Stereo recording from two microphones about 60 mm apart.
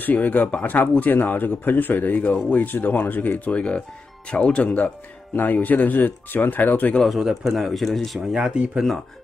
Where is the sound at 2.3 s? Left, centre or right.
Centre.